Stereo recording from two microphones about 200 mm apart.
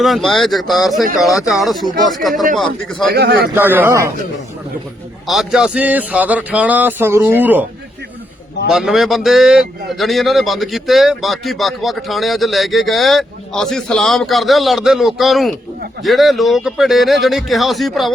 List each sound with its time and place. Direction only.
0.0 s speech: centre (ahead or behind)
3.1 s a man's voice: 55° right (ahead or behind)
3.5 s a man's voice: 10° right (ahead or behind)
5.2 s a man's voice: centre (ahead or behind)
8.7 s speech: centre (ahead or behind)